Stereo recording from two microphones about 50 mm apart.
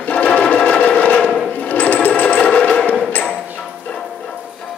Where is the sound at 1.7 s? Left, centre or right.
Left.